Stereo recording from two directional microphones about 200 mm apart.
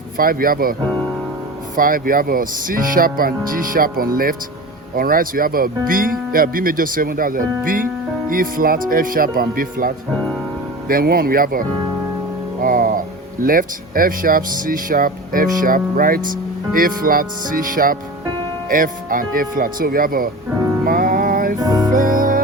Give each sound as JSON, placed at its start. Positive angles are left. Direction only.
{"t": 0.2, "sound": "speech", "side_deg": -45}
{"t": 12.6, "sound": "speech", "side_deg": -45}
{"t": 20.8, "sound": "music", "side_deg": -45}
{"t": 21.6, "sound": "music", "side_deg": -20}
{"t": 21.9, "sound": "music", "side_deg": -45}